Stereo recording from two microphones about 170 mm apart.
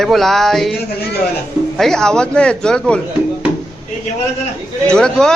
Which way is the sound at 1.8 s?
5° left (ahead or behind).